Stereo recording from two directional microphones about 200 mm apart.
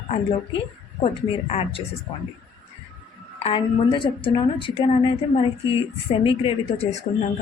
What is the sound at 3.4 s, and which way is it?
A woman's voice, 25° left (ahead or behind).